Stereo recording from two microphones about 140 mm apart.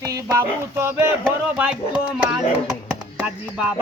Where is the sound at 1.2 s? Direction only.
10° right (ahead or behind).